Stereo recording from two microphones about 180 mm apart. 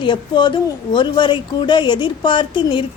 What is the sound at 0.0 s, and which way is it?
A woman's voice, 25° left (ahead or behind).